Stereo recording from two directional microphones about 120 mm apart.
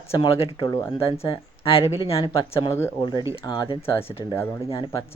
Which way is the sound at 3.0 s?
35° left (ahead or behind).